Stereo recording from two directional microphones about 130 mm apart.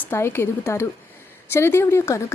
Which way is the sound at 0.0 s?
20° left (ahead or behind).